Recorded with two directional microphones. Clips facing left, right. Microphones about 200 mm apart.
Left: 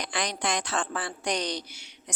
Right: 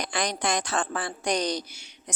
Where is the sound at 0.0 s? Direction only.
45° right (ahead or behind).